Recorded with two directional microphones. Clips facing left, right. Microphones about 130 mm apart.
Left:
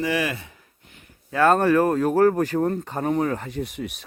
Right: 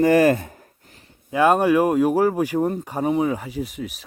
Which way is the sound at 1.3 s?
15° right (ahead or behind).